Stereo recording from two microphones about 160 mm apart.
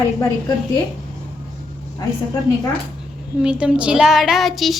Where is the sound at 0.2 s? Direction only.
20° left (ahead or behind).